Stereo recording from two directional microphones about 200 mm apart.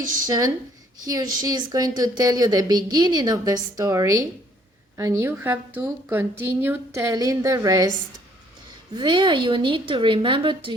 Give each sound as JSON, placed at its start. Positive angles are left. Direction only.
{"t": 0.3, "sound": "a woman's voice", "side_deg": -15}
{"t": 9.0, "sound": "a woman's voice", "side_deg": -25}